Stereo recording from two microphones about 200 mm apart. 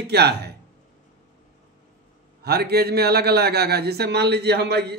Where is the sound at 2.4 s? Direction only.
50° right (ahead or behind).